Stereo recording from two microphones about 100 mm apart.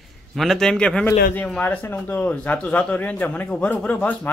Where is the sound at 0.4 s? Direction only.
5° left (ahead or behind).